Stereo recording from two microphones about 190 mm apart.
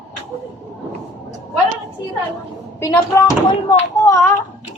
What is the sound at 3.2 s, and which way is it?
Speech, 20° left (ahead or behind).